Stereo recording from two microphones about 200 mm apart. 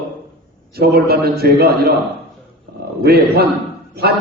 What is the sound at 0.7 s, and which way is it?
A man's voice, 50° right (ahead or behind).